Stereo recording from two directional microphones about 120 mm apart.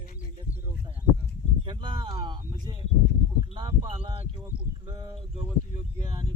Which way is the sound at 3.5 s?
40° right (ahead or behind).